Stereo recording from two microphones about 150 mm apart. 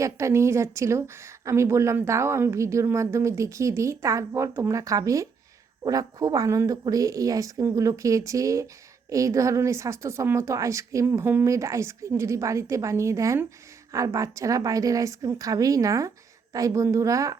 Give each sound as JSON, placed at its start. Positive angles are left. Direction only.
{"t": 0.0, "sound": "a woman's voice", "side_deg": -20}